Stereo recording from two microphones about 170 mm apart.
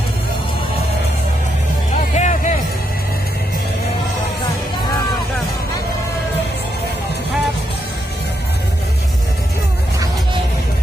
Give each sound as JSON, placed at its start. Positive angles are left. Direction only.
{"t": 2.1, "sound": "music", "side_deg": 45}